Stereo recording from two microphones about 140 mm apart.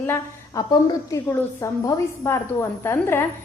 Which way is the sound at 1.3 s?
20° left (ahead or behind).